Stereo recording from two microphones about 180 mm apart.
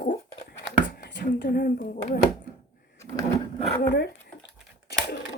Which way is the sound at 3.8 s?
75° left (ahead or behind).